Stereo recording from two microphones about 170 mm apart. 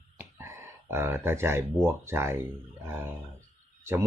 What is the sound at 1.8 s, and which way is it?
Speech, 15° right (ahead or behind).